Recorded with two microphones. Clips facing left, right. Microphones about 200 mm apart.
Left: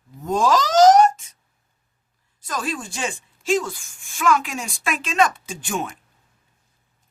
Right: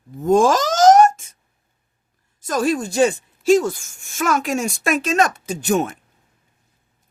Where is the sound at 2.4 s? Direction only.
45° right (ahead or behind).